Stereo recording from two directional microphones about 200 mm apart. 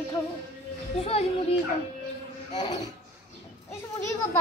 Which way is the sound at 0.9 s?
30° left (ahead or behind).